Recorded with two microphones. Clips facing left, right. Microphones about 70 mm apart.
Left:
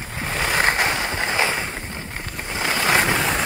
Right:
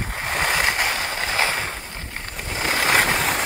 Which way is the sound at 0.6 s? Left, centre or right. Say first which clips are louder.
Left 2 dB; left.